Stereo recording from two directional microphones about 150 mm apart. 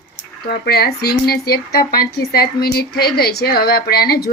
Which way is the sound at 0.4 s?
90° left.